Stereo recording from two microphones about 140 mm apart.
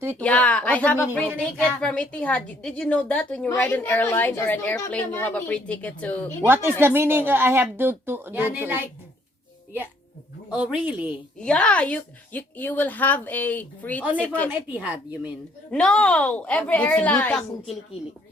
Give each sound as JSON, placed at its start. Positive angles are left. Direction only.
{"t": 0.2, "sound": "a woman's voice", "side_deg": 10}
{"t": 6.4, "sound": "speech", "side_deg": -15}
{"t": 10.5, "sound": "speech", "side_deg": -5}
{"t": 11.3, "sound": "a woman's voice", "side_deg": 5}
{"t": 14.5, "sound": "speech", "side_deg": -10}
{"t": 15.7, "sound": "a woman's voice", "side_deg": 5}